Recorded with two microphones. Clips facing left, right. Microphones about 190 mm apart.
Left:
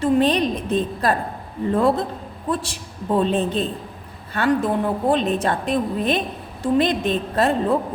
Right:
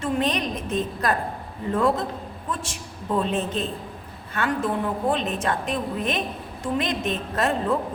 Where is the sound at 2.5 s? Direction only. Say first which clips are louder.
Left 7 dB; 35° left (ahead or behind).